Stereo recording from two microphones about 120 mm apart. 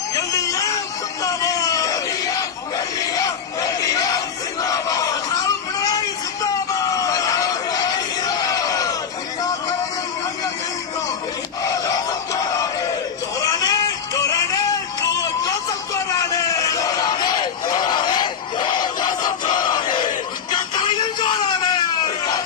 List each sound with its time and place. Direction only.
0.1 s a sound: 30° left (ahead or behind)
3.2 s crowd: 30° left (ahead or behind)
4.7 s battle cry: 30° left (ahead or behind)
6.4 s a sound: 30° left (ahead or behind)
8.2 s crowd: 30° left (ahead or behind)
11.6 s crowd: 30° left (ahead or behind)
13.4 s music: 30° left (ahead or behind)
16.3 s a sound: 30° left (ahead or behind)
17.7 s battle cry: 35° left (ahead or behind)